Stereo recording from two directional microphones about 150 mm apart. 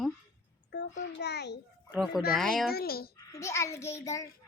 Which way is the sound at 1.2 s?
90° left.